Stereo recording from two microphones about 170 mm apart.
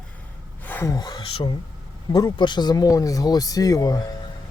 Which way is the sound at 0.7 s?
10° left (ahead or behind).